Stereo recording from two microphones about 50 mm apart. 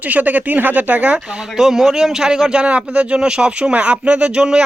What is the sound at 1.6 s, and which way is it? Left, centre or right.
A man's voice, centre.